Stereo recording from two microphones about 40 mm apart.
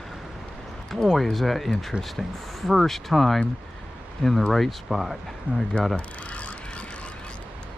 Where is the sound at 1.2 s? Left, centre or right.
Centre.